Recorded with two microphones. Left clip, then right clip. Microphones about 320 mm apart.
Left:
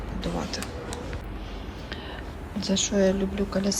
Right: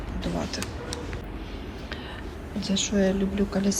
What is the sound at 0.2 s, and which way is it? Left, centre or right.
Speech, centre.